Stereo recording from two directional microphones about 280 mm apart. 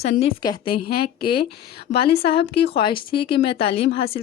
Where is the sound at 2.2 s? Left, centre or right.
Centre.